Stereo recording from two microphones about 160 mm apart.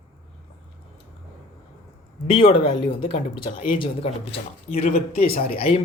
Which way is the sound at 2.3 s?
35° left (ahead or behind).